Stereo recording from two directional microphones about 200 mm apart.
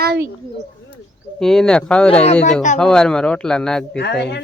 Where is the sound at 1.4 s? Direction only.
Centre (ahead or behind).